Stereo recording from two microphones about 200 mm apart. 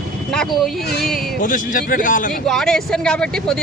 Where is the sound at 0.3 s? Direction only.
Centre (ahead or behind).